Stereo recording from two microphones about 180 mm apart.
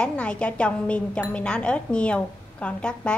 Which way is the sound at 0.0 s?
5° left (ahead or behind).